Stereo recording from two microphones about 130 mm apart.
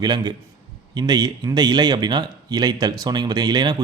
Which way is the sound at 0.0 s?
35° right (ahead or behind).